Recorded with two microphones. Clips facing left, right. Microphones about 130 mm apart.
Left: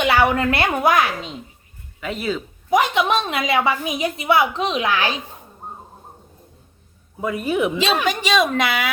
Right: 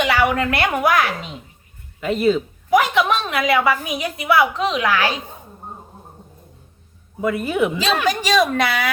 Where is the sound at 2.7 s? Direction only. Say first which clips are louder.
Right 1 dB; 25° left (ahead or behind).